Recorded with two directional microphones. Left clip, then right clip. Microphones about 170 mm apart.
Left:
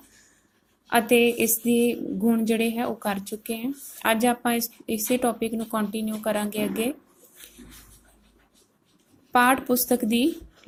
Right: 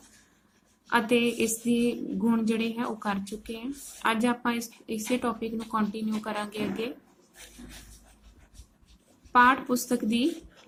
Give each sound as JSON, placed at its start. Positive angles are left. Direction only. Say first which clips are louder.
{"t": 0.9, "sound": "a woman's voice", "louder": "left 5 dB", "side_deg": 25}
{"t": 9.3, "sound": "a woman's voice", "louder": "left 1 dB", "side_deg": 25}